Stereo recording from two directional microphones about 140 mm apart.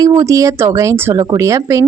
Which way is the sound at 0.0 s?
25° right (ahead or behind).